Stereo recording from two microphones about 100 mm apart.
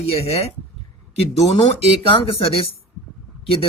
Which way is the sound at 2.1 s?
75° left (ahead or behind).